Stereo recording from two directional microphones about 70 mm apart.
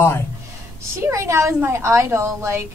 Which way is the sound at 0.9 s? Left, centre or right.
Right.